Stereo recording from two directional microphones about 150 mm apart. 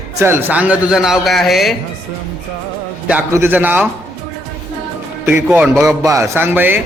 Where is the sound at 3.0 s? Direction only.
15° right (ahead or behind).